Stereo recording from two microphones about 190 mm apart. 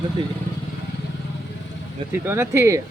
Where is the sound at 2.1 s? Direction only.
10° right (ahead or behind).